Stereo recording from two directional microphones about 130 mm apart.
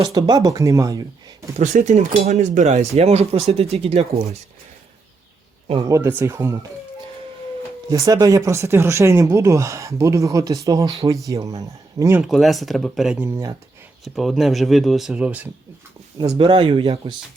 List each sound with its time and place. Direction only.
0.0 s speech: 30° right (ahead or behind)
1.5 s speech: 65° right (ahead or behind)
6.0 s speech: 15° right (ahead or behind)
7.9 s speech: 25° right (ahead or behind)
12.2 s speech: centre (ahead or behind)
13.1 s speech: 20° right (ahead or behind)
14.0 s speech: centre (ahead or behind)
16.4 s speech: 40° right (ahead or behind)